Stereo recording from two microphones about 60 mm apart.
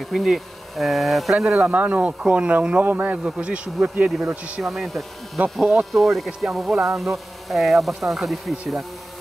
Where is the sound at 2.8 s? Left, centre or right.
Right.